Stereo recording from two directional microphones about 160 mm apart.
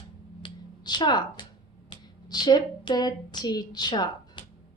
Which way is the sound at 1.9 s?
25° left (ahead or behind).